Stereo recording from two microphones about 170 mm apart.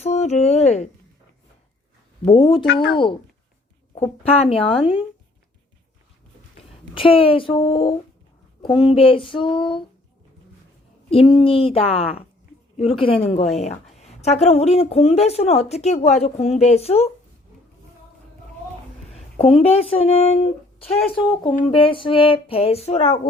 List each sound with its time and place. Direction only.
0.0 s speech: 40° left (ahead or behind)
2.2 s a woman's voice: 30° left (ahead or behind)
3.9 s a woman's voice: 40° left (ahead or behind)
6.9 s a woman's voice: 30° left (ahead or behind)
8.6 s a sound: 30° left (ahead or behind)
11.1 s a woman's voice: 35° left (ahead or behind)
13.2 s a woman's voice: 40° left (ahead or behind)
19.4 s a woman's voice: 35° left (ahead or behind)